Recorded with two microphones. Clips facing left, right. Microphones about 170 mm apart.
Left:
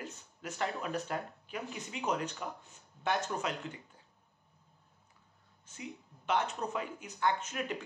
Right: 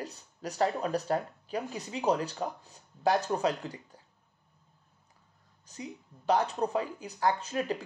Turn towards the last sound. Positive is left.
turn(degrees=-35)  # may be behind; listen again after turning